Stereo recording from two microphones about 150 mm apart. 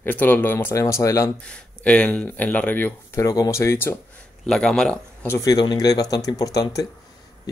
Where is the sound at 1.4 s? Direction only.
5° left (ahead or behind).